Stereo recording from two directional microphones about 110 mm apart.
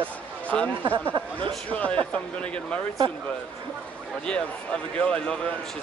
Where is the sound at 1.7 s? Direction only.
15° left (ahead or behind).